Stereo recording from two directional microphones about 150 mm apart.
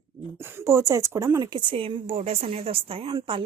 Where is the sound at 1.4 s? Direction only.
30° right (ahead or behind).